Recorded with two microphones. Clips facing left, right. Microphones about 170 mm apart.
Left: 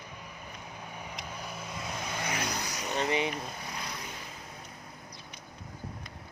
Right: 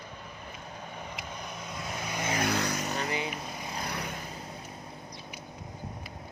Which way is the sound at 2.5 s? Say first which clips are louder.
Right 7 dB; 80° right.